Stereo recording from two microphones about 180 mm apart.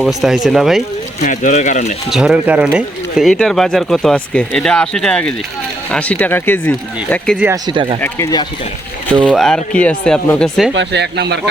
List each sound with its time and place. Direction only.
0.0 s speech: centre (ahead or behind)
1.2 s speech: 45° left (ahead or behind)
2.0 s speech: 5° right (ahead or behind)
7.3 s speech: 10° right (ahead or behind)
7.7 s speech: 30° right (ahead or behind)
8.0 s speech: 20° left (ahead or behind)
9.2 s speech: centre (ahead or behind)
10.8 s speech: 70° right (ahead or behind)